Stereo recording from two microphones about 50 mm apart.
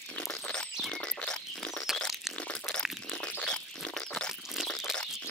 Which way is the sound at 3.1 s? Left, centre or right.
Left.